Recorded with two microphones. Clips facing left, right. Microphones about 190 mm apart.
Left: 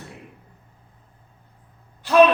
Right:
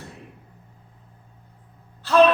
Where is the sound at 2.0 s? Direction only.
15° left (ahead or behind).